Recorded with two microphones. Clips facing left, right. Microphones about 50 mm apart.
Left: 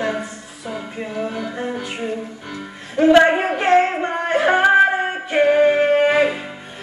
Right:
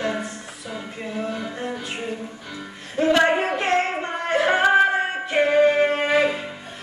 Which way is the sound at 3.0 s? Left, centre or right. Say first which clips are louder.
Left 6 dB; left.